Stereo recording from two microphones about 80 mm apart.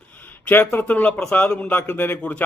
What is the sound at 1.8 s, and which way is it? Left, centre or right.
Speech, left.